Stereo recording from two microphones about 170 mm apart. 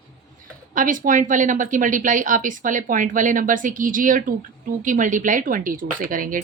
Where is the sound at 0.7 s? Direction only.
50° right (ahead or behind).